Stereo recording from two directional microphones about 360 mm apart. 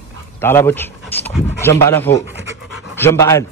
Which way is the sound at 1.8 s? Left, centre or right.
Centre.